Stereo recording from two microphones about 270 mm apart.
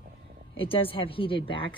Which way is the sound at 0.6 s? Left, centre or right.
Centre.